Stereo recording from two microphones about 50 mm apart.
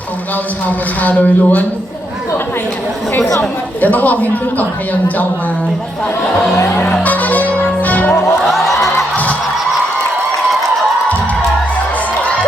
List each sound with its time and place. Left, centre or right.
1.0 s a man's voice: left
3.8 s a man's voice: left
7.0 s music: left
8.1 s music: centre